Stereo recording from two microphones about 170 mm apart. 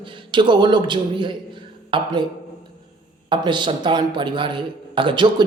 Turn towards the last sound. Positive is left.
turn(degrees=-30)  # may be behind; listen again after turning